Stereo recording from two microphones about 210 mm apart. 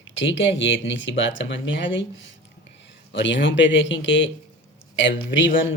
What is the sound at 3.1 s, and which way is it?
Speech, 60° left (ahead or behind).